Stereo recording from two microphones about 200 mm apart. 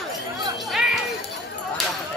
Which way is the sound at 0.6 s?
Centre (ahead or behind).